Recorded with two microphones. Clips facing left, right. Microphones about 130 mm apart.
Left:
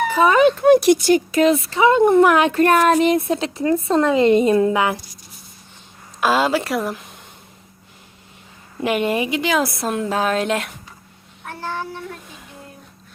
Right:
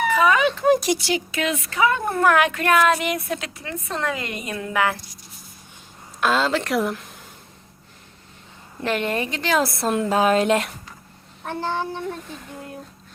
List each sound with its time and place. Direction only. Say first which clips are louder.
0.0 s speech: left 4 dB; 35° left (ahead or behind)
0.6 s speech: left 6 dB; 65° left (ahead or behind); by 2.5 s 20° left (ahead or behind)
2.5 s a woman's voice: left 4 dB; 40° left (ahead or behind); by 4.9 s 20° left (ahead or behind)
6.1 s a woman's voice: left 3 dB; 10° left (ahead or behind)
8.8 s a woman's voice: left 4 dB; 10° left (ahead or behind)
11.4 s a child's voice: right 2 dB; 20° right (ahead or behind)